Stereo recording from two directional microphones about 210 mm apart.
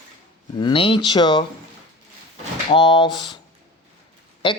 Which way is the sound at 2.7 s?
20° left (ahead or behind).